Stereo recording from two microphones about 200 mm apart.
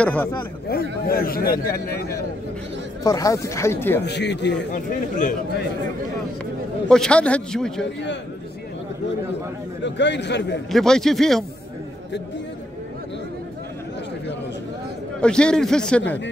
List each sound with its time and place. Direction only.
0.0 s speech: 5° left (ahead or behind)
0.7 s a man's voice: 50° left (ahead or behind)
3.0 s speech: 15° left (ahead or behind)
4.0 s a man's voice: 60° left (ahead or behind)
4.7 s speech: 40° left (ahead or behind)
6.9 s a man's voice: 5° left (ahead or behind)
9.8 s a man's voice: 60° left (ahead or behind)
10.7 s a man's voice: centre (ahead or behind)
15.1 s a man's voice: 5° left (ahead or behind)